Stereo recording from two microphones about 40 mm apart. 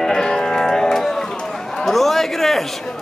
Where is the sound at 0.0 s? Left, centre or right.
Centre.